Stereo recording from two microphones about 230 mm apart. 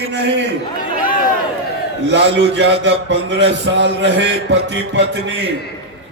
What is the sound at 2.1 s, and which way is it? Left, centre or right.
A man's voice, right.